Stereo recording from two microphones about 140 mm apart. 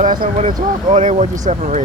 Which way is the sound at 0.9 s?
60° right (ahead or behind).